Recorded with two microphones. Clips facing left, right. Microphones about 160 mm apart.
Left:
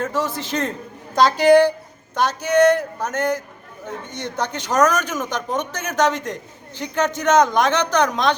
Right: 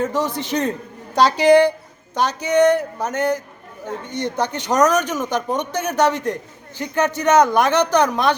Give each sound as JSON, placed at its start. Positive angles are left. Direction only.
{"t": 0.0, "sound": "speech", "side_deg": -15}